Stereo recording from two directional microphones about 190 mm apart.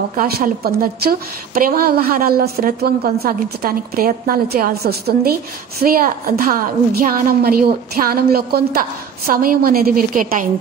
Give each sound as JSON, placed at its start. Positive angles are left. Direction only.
{"t": 0.1, "sound": "a woman's voice", "side_deg": -50}